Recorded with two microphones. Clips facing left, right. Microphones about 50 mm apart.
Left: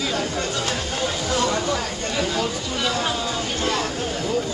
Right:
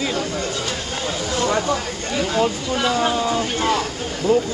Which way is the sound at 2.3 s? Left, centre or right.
Centre.